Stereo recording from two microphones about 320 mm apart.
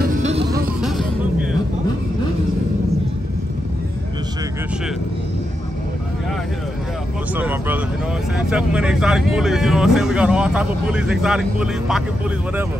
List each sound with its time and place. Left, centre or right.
0.2 s music: centre
0.7 s vehicle: centre
7.3 s vehicle: centre
8.4 s speech: centre